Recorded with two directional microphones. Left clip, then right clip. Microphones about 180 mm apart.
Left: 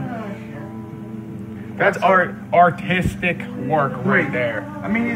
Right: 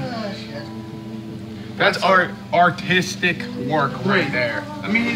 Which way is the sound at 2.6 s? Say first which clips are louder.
Left 1 dB; 10° right (ahead or behind).